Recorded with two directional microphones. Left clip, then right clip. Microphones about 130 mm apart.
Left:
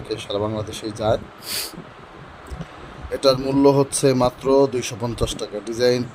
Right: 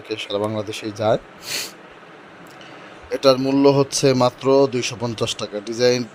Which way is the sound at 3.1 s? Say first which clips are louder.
Right 2 dB; centre (ahead or behind).